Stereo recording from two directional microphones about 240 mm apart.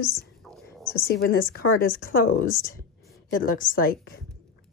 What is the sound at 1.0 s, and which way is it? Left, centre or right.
Speech, left.